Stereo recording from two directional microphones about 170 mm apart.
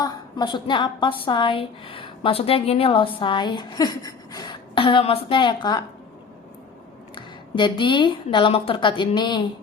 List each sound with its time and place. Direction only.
0.0 s a woman's voice: 25° left (ahead or behind)
7.2 s a woman's voice: 30° left (ahead or behind)